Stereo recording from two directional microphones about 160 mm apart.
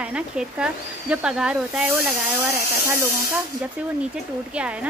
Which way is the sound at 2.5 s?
15° right (ahead or behind).